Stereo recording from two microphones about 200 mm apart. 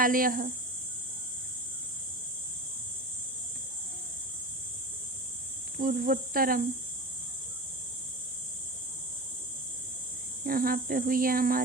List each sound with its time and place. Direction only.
0.0 s speech: 45° right (ahead or behind)
5.7 s speech: 45° right (ahead or behind)
10.4 s speech: 45° right (ahead or behind)